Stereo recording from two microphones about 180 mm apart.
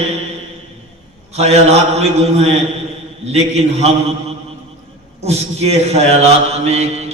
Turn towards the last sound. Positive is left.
turn(degrees=-35)  # may be behind; listen again after turning